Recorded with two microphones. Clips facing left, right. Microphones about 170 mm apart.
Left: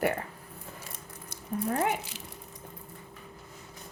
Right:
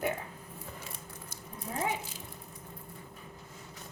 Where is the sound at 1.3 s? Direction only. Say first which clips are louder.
Left 12 dB; 65° left (ahead or behind).